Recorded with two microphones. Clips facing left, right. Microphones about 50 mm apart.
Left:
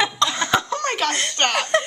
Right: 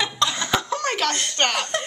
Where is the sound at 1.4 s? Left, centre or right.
Centre.